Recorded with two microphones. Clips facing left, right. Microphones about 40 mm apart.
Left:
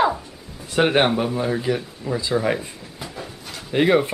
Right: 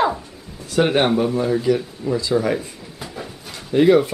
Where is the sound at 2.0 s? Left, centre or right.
Centre.